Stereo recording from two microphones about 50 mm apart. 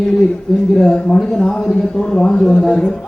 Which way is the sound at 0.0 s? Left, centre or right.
Centre.